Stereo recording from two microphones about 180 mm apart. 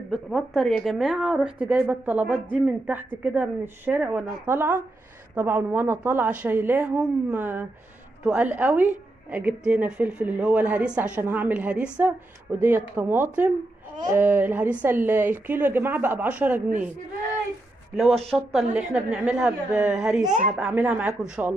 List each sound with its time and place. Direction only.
0.1 s a woman's voice: centre (ahead or behind)
17.9 s a woman's voice: centre (ahead or behind)
20.2 s speech: 45° right (ahead or behind)
20.5 s a woman's voice: 5° right (ahead or behind)